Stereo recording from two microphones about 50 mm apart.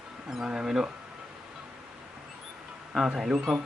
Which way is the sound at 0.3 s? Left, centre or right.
Centre.